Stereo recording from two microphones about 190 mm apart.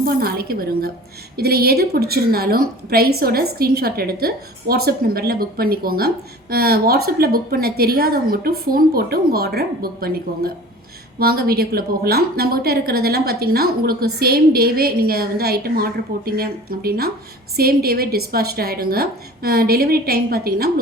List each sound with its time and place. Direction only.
0.0 s a woman's voice: 50° right (ahead or behind)